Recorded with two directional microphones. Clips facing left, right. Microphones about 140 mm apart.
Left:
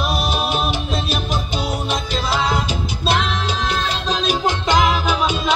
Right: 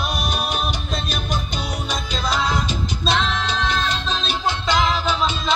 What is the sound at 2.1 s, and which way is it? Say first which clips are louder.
Music: left 1 dB; 10° left (ahead or behind).